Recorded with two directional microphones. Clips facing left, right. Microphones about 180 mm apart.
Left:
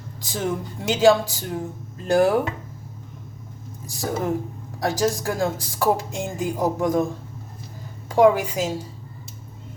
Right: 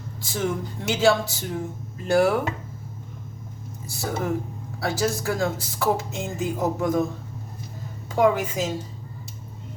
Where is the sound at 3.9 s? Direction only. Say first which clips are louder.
Left 2 dB; 15° left (ahead or behind).